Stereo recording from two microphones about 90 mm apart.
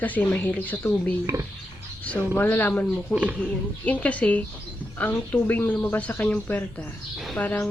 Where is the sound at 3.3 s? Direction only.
5° left (ahead or behind).